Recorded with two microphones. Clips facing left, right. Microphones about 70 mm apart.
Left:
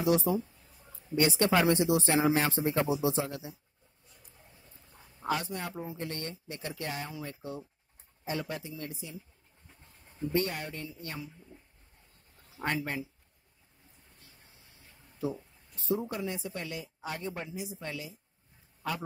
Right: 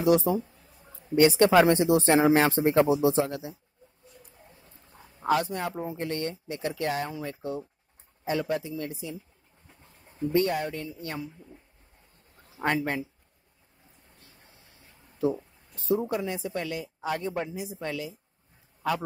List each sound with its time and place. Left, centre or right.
0.0 s speech: right
1.1 s speech: right
2.3 s speech: right
3.1 s speech: right
5.2 s speech: right
7.2 s speech: right
10.3 s speech: right
12.6 s speech: right
15.9 s speech: right
17.4 s speech: right
17.7 s speech: right